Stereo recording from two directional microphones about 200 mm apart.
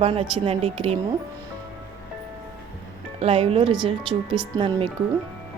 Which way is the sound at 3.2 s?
30° right (ahead or behind).